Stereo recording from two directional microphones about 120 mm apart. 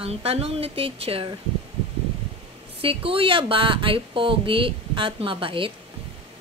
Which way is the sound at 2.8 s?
50° right (ahead or behind).